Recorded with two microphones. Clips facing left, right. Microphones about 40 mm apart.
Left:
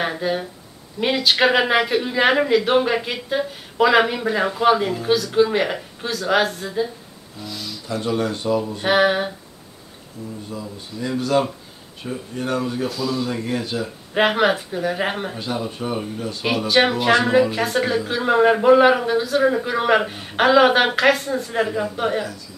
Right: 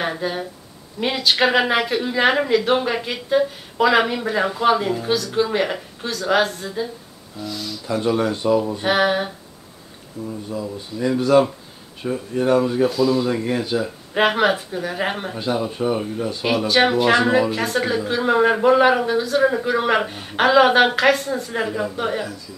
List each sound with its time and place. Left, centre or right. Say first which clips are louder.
0.0 s speech: left 1 dB; centre
8.2 s speech: right 3 dB; centre
8.8 s speech: left 4 dB; centre
12.1 s speech: right 6 dB; right
14.1 s speech: even; centre
15.3 s speech: right 3 dB; centre
16.4 s speech: even; centre